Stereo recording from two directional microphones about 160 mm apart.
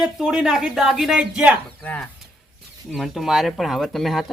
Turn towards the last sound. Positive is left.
turn(degrees=0)  # may be behind; listen again after turning